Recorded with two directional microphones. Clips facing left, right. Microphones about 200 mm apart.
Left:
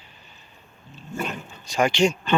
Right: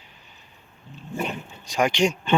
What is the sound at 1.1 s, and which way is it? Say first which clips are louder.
Speech: right 1 dB; 15° right (ahead or behind).